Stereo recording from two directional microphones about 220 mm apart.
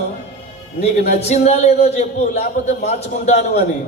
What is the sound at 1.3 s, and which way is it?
A man's voice, 30° left (ahead or behind).